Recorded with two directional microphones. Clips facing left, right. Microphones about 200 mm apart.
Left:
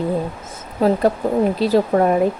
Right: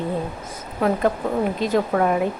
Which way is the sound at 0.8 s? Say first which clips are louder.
Left 4 dB; 30° left (ahead or behind).